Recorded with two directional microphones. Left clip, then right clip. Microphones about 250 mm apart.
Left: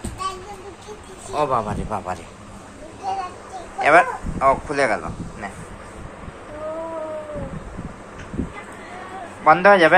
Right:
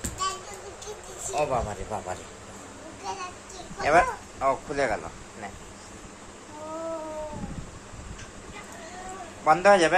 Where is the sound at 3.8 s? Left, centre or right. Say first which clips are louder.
Left 7 dB; centre.